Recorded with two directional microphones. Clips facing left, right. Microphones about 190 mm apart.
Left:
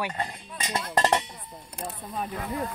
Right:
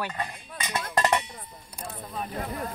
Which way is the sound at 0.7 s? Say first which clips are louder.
Left 1 dB; 30° left (ahead or behind).